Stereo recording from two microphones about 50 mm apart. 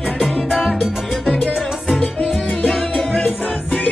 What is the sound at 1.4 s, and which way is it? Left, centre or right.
Salsa music, centre.